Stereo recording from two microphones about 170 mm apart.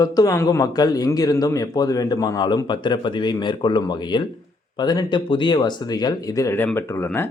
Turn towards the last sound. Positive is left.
turn(degrees=15)  # may be behind; listen again after turning